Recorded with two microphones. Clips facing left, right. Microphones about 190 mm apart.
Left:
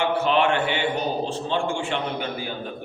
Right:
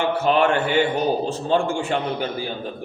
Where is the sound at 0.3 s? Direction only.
40° right (ahead or behind).